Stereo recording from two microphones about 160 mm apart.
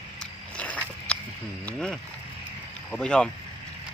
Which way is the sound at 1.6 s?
5° left (ahead or behind).